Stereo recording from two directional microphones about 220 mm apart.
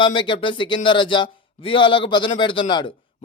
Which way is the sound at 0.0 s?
20° left (ahead or behind).